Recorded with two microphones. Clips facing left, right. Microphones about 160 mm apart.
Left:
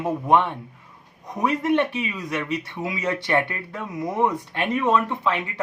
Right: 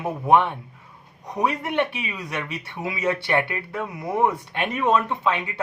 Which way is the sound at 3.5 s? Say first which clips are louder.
Even; 10° right (ahead or behind).